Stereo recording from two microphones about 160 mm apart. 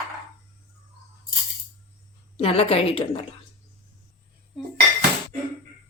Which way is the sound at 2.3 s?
40° left (ahead or behind).